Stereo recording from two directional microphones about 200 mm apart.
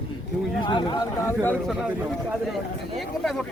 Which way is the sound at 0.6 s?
25° left (ahead or behind).